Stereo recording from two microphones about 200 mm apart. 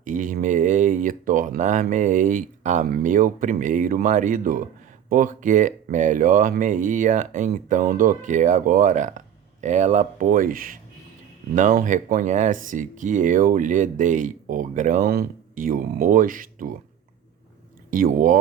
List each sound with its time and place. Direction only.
0.0 s speech: 40° right (ahead or behind)
17.9 s speech: 40° right (ahead or behind)